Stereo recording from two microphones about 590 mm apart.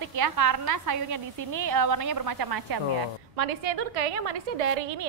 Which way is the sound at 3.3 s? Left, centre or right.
Right.